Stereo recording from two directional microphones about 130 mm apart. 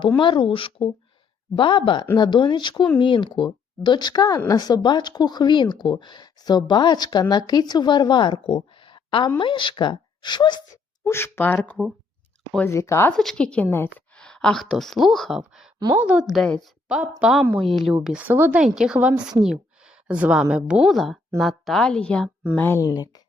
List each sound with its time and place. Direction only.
0.2 s speech: 40° left (ahead or behind)
11.0 s speech: 20° left (ahead or behind)
13.1 s speech: 5° left (ahead or behind)
13.7 s speech: 20° left (ahead or behind)
14.2 s a woman's voice: 5° left (ahead or behind); by 16.2 s 10° right (ahead or behind)
16.3 s a woman's voice: 5° left (ahead or behind); by 18.6 s 15° right (ahead or behind)
18.6 s a woman's voice: 5° right (ahead or behind)
22.5 s speech: 15° left (ahead or behind)
22.9 s speech: 30° left (ahead or behind)